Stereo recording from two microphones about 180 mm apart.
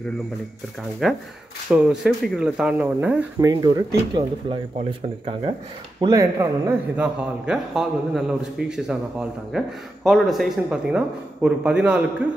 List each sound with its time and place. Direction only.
1.0 s a man's voice: 5° right (ahead or behind)
3.4 s speech: 25° right (ahead or behind)
5.9 s speech: 20° right (ahead or behind)
7.0 s a man's voice: 5° right (ahead or behind)